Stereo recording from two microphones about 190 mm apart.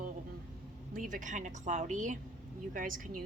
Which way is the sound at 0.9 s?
45° right (ahead or behind).